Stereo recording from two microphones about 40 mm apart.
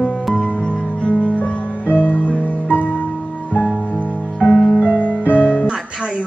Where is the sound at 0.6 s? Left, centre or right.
Left.